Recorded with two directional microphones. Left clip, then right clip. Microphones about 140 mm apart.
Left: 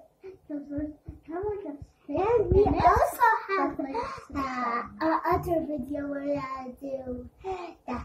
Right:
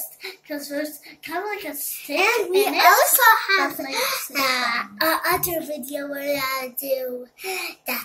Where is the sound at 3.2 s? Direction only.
25° right (ahead or behind).